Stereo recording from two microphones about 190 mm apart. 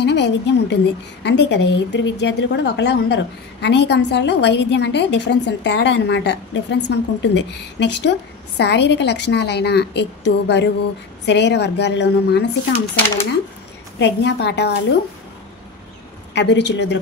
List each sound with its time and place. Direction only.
0.0 s a woman's voice: 65° left (ahead or behind)
13.9 s a woman's voice: 65° left (ahead or behind)
16.3 s a woman's voice: 65° left (ahead or behind)